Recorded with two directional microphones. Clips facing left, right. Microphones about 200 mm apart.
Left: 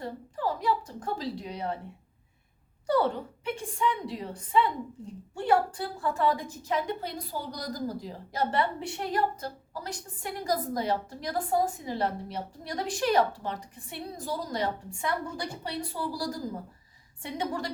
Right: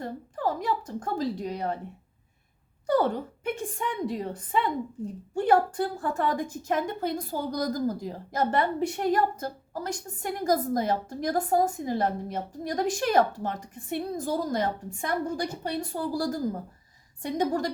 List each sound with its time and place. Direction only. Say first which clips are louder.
0.0 s a woman's voice: right 2 dB; 45° right (ahead or behind)
2.8 s a woman's voice: right 2 dB; 45° right (ahead or behind)